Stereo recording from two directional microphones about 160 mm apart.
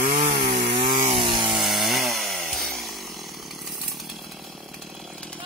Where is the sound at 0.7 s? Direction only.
30° right (ahead or behind).